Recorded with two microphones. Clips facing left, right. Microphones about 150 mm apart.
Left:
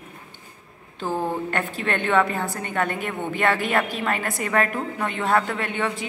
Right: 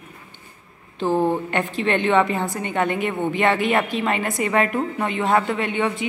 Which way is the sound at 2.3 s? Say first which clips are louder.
Right 3 dB; 20° right (ahead or behind).